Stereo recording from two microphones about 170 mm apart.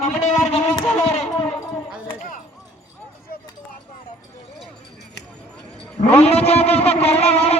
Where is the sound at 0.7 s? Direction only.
5° left (ahead or behind).